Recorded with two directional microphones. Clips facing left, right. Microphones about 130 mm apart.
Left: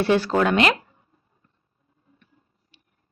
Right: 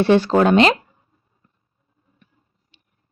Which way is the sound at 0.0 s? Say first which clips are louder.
Right 5 dB; 25° right (ahead or behind).